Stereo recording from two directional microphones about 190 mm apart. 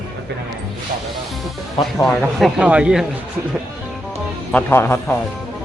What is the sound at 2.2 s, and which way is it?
Speech, 5° right (ahead or behind).